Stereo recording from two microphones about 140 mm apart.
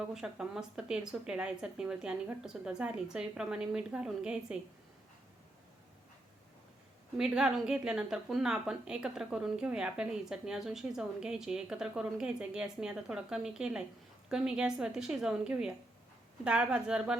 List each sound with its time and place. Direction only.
0.0 s a woman's voice: 5° right (ahead or behind)
7.2 s a woman's voice: 5° right (ahead or behind)